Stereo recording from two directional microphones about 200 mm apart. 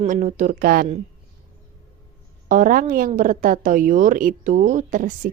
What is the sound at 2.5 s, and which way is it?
A woman's voice, 45° right (ahead or behind).